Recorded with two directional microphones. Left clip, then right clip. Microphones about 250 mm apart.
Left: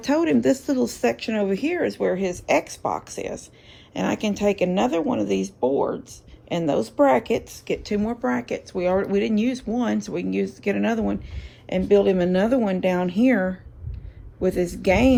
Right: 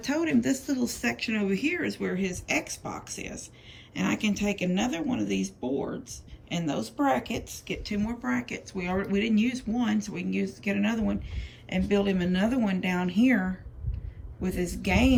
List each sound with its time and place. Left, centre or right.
0.0 s speech: centre
14.4 s speech: left